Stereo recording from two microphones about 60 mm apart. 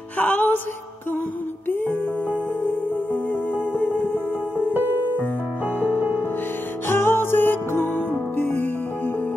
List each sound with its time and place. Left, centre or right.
0.2 s music: left
3.7 s music: left
4.6 s music: centre
6.9 s music: left